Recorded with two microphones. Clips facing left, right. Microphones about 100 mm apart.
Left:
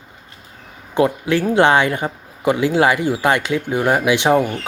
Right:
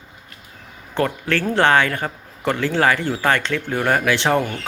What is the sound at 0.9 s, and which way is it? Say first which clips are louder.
Speech: left 5 dB; 15° left (ahead or behind).